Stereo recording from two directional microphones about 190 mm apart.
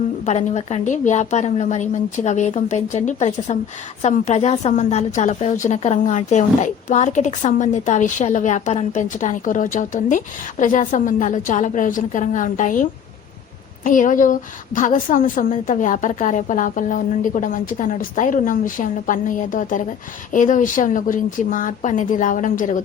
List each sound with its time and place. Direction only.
0.3 s a woman's voice: 35° left (ahead or behind)